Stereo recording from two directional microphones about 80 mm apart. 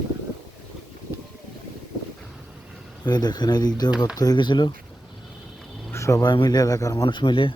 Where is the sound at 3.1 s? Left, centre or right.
Left.